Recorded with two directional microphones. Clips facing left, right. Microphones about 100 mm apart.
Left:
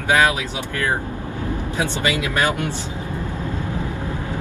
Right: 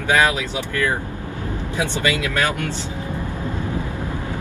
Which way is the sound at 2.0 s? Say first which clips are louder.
Even; 20° left (ahead or behind).